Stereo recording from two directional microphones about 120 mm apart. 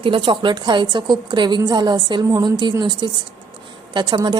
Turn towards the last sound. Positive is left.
turn(degrees=-40)  # may be behind; listen again after turning